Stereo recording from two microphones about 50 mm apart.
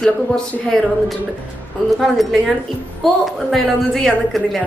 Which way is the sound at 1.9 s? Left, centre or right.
Centre.